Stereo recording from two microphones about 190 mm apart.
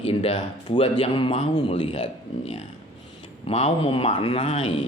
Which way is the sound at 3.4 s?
30° left (ahead or behind).